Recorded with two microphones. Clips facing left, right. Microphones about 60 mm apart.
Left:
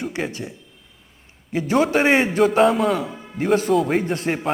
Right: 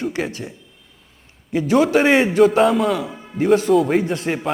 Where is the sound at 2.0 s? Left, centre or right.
Centre.